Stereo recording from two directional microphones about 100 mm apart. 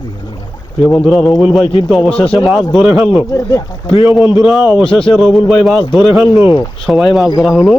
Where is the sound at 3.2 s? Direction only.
35° left (ahead or behind).